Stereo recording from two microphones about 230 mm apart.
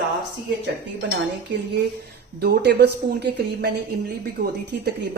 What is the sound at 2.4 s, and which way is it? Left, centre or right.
A woman's voice, right.